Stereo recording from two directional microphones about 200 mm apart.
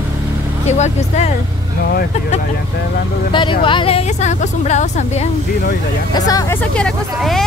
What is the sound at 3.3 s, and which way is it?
A woman's voice, 25° left (ahead or behind).